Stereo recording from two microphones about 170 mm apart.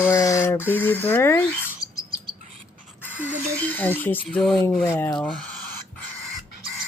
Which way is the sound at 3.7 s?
10° left (ahead or behind).